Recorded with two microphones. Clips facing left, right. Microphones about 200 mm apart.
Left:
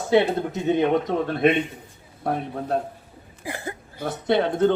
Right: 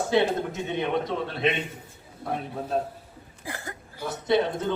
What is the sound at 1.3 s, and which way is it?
Speech, 50° left (ahead or behind).